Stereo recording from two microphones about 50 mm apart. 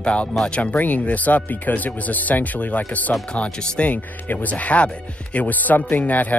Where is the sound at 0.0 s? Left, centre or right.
Left.